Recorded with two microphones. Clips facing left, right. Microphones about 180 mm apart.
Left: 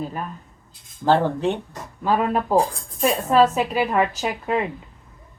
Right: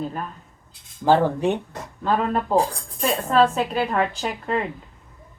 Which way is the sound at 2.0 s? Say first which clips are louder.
Left 1 dB; 10° left (ahead or behind).